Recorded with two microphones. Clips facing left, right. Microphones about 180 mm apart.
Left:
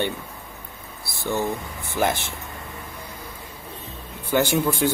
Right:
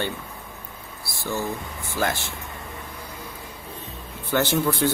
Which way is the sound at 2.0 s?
20° left (ahead or behind).